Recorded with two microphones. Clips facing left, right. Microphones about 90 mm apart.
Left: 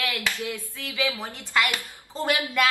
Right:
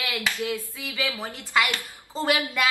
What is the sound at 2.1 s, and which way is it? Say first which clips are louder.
Speech: right 1 dB; centre (ahead or behind).